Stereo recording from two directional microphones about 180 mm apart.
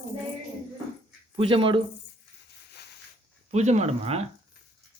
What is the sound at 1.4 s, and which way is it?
Speech, 30° right (ahead or behind).